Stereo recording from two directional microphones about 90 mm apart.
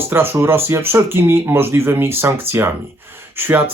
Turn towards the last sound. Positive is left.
turn(degrees=-20)  # may be behind; listen again after turning